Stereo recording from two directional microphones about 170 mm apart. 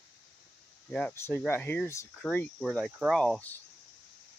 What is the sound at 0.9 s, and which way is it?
Speech, 10° left (ahead or behind).